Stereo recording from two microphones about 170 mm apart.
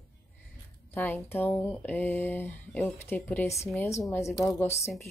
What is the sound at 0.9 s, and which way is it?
Speech, 10° left (ahead or behind).